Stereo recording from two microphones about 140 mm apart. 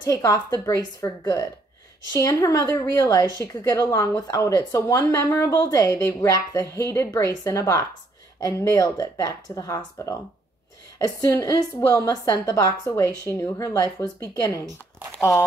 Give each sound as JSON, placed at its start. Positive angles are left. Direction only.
{"t": 0.0, "sound": "a woman's voice", "side_deg": 25}
{"t": 15.1, "sound": "speech", "side_deg": 5}